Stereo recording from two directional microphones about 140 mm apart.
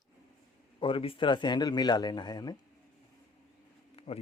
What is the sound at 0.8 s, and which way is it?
Speech, 40° left (ahead or behind).